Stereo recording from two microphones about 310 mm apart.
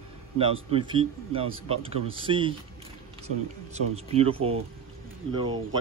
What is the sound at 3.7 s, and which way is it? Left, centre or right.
Speech, centre.